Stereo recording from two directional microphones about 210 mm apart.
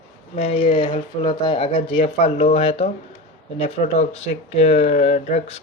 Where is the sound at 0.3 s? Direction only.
30° left (ahead or behind).